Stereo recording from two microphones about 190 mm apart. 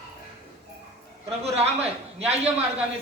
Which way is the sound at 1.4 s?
35° right (ahead or behind).